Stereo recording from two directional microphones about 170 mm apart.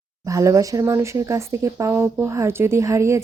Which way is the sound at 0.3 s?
20° right (ahead or behind).